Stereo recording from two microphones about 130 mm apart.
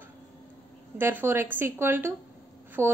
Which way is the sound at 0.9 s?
15° right (ahead or behind).